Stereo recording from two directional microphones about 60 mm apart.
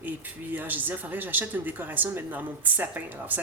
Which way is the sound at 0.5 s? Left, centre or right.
Right.